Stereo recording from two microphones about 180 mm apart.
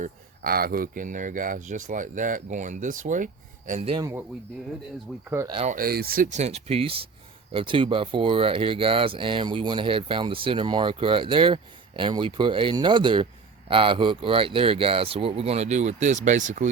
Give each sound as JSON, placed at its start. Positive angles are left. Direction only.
{"t": 0.0, "sound": "speech", "side_deg": -55}
{"t": 3.9, "sound": "speech", "side_deg": -15}
{"t": 5.1, "sound": "speech", "side_deg": 0}
{"t": 5.5, "sound": "speech", "side_deg": -30}
{"t": 5.7, "sound": "speech", "side_deg": -55}